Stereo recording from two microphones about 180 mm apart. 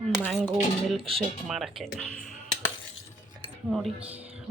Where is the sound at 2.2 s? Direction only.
45° left (ahead or behind).